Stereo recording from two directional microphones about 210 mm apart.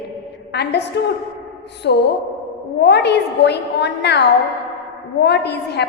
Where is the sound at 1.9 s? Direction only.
55° left (ahead or behind).